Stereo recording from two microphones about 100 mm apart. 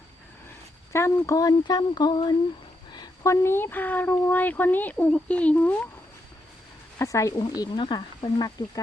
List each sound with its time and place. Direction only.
0.9 s speech: 30° left (ahead or behind); by 2.3 s 45° left (ahead or behind)
3.2 s a child's voice: 25° left (ahead or behind)
7.0 s speech: 30° left (ahead or behind)
7.6 s speech: 45° left (ahead or behind)